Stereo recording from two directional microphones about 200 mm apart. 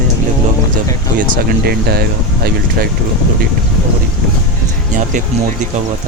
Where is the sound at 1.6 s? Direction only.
50° right (ahead or behind).